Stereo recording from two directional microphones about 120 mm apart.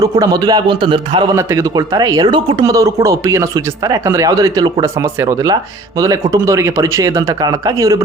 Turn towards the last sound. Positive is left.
turn(degrees=-30)  # may be behind; listen again after turning